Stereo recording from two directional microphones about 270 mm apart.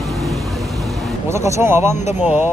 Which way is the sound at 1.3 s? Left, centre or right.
Centre.